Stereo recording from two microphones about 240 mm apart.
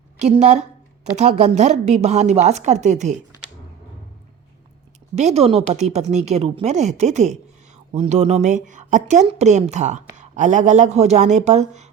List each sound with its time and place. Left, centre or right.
0.2 s speech: right
5.1 s speech: right